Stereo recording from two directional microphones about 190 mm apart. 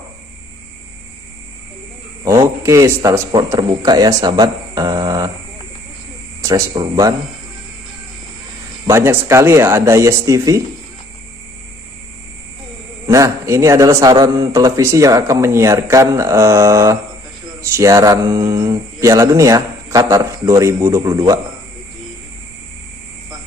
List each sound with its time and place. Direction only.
2.2 s a man's voice: 15° right (ahead or behind)
6.4 s a man's voice: 20° right (ahead or behind)
8.8 s a man's voice: 15° right (ahead or behind)
13.0 s a man's voice: 15° right (ahead or behind)